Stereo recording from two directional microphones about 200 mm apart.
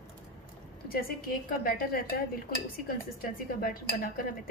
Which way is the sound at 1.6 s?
45° left (ahead or behind).